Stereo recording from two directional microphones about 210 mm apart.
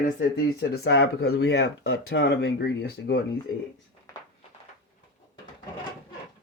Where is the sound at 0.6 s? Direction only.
50° left (ahead or behind).